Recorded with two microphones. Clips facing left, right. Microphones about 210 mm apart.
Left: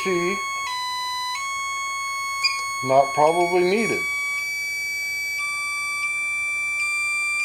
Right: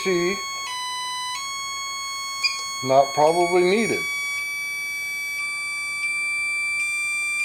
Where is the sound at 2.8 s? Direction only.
5° right (ahead or behind).